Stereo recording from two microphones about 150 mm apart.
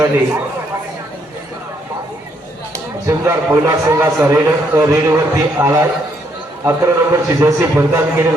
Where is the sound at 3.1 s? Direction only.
20° right (ahead or behind).